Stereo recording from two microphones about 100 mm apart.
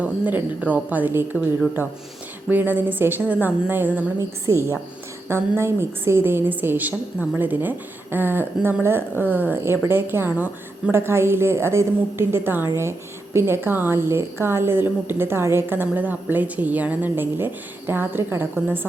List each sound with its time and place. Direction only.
0.0 s a woman's voice: 15° right (ahead or behind)